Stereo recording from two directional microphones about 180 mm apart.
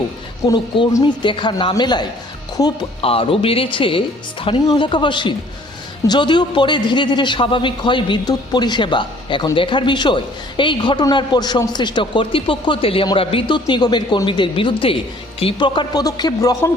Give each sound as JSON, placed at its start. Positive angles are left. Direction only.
{"t": 0.5, "sound": "a man's voice", "side_deg": 25}